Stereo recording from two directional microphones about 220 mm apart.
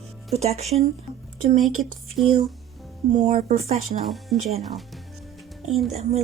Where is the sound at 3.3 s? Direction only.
30° right (ahead or behind).